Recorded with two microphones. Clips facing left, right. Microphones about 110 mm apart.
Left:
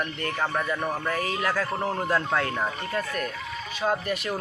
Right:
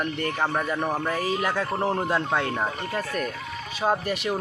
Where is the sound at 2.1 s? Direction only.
20° right (ahead or behind).